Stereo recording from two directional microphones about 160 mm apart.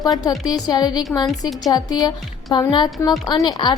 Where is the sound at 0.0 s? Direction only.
25° left (ahead or behind).